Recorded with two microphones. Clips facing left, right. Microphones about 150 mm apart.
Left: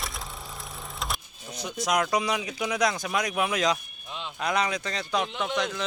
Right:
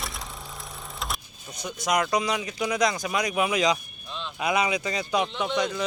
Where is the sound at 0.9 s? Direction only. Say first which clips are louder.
Even; centre (ahead or behind).